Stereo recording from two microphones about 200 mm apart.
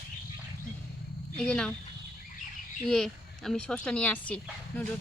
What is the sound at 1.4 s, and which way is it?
Speech, 5° left (ahead or behind).